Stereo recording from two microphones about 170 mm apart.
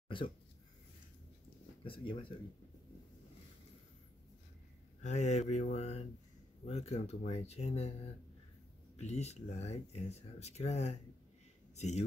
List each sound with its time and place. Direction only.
0.1 s speech: 30° left (ahead or behind)
1.8 s speech: 30° left (ahead or behind)
5.0 s speech: 40° left (ahead or behind)
8.9 s a man's voice: 40° left (ahead or behind)